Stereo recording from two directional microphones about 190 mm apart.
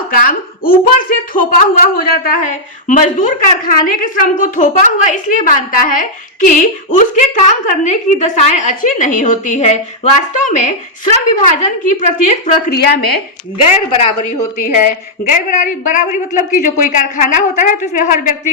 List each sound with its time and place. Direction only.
0.1 s a woman's voice: 50° left (ahead or behind)
12.7 s a woman's voice: 60° left (ahead or behind)
13.9 s a woman's voice: 30° left (ahead or behind)
14.6 s a woman's voice: 45° left (ahead or behind)